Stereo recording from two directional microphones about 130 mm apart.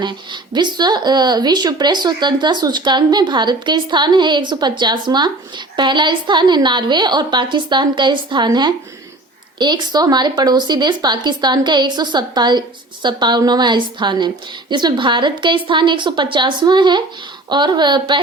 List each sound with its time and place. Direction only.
0.0 s speech: 35° right (ahead or behind)